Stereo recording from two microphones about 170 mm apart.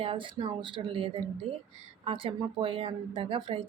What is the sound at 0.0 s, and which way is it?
Speech, 30° right (ahead or behind).